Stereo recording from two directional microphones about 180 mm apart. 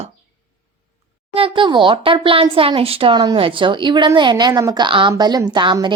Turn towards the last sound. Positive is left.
turn(degrees=-25)  # may be behind; listen again after turning